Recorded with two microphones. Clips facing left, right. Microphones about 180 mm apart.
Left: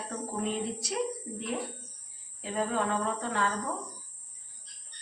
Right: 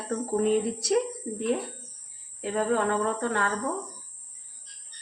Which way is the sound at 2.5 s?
60° right (ahead or behind).